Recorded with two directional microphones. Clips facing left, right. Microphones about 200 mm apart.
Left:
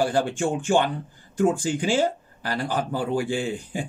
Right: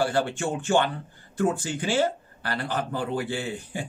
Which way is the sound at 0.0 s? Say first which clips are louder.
Left 2 dB; 15° left (ahead or behind).